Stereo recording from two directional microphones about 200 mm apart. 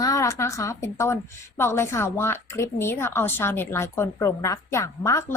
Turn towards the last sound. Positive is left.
turn(degrees=15)  # may be behind; listen again after turning